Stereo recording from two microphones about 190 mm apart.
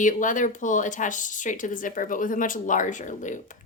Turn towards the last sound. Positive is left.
turn(degrees=40)  # may be behind; listen again after turning